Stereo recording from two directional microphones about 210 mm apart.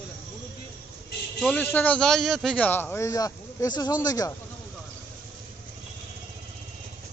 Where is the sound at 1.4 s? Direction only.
5° left (ahead or behind).